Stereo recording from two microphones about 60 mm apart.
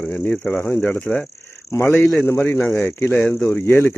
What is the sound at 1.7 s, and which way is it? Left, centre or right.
Speech, left.